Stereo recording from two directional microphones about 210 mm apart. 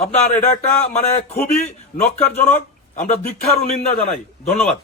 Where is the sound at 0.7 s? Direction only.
5° left (ahead or behind).